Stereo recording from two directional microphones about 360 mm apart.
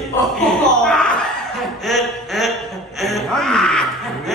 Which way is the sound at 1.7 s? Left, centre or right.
Centre.